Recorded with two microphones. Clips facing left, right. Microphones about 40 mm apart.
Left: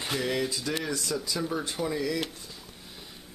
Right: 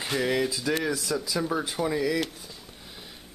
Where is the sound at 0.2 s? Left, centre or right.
Centre.